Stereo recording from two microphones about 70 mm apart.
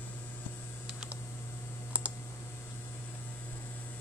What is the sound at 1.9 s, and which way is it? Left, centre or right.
Clicking, centre.